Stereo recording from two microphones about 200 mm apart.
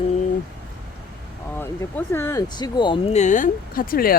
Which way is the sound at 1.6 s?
10° left (ahead or behind).